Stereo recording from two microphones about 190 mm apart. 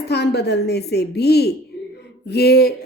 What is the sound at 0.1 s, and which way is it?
A woman's voice, 60° left (ahead or behind).